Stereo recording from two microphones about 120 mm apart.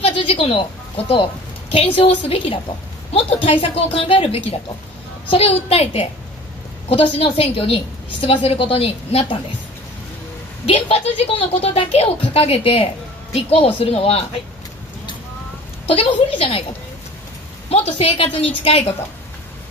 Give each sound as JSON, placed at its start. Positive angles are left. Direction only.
{"t": 0.0, "sound": "a woman's voice", "side_deg": 50}
{"t": 3.1, "sound": "a sound", "side_deg": 55}
{"t": 3.4, "sound": "a woman's voice", "side_deg": 50}
{"t": 10.6, "sound": "speech", "side_deg": 55}
{"t": 15.9, "sound": "a woman's voice", "side_deg": 50}
{"t": 17.6, "sound": "speech", "side_deg": 55}